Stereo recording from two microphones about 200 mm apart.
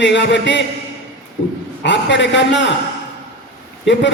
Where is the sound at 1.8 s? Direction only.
60° left (ahead or behind).